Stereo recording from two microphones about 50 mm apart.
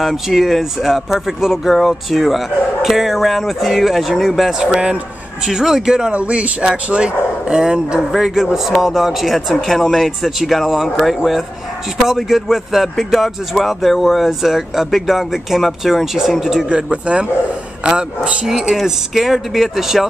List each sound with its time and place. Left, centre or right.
0.0 s a man's voice: centre
6.1 s speech: right
8.1 s speech: centre
12.2 s speech: centre
16.6 s a man's voice: right; by 20.1 s centre